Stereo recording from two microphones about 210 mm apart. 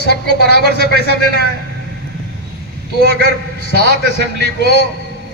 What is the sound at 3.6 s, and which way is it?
A man's voice, 55° left (ahead or behind).